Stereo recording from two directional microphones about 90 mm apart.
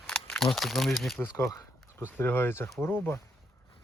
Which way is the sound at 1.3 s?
30° left (ahead or behind).